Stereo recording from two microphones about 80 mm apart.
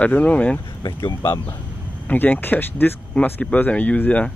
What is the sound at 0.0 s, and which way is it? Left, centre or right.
Speech, centre.